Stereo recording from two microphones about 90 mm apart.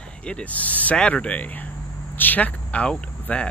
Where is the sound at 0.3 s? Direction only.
15° left (ahead or behind).